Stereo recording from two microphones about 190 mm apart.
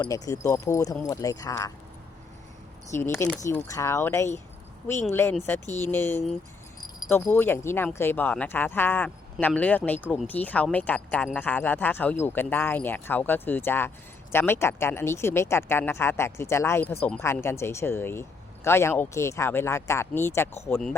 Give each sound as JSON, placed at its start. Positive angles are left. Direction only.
{"t": 0.1, "sound": "speech", "side_deg": 15}
{"t": 2.9, "sound": "speech", "side_deg": 15}